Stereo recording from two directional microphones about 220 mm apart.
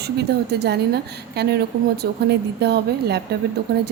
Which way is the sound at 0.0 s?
50° right (ahead or behind).